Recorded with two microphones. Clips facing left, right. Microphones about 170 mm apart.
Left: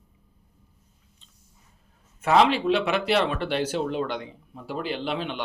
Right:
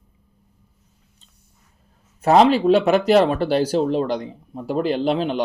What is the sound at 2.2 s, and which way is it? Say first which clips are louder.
Speech: right 6 dB; 40° right (ahead or behind).